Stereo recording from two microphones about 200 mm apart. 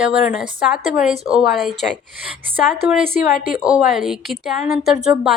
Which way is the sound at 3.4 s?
40° left (ahead or behind).